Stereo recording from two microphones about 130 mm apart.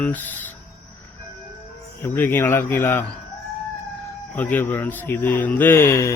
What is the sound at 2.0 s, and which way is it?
A man's voice, 20° left (ahead or behind).